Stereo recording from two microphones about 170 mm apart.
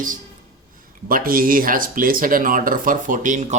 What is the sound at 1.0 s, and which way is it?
Speech, 55° right (ahead or behind).